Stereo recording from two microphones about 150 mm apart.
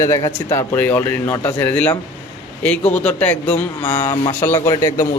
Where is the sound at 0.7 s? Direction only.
10° left (ahead or behind).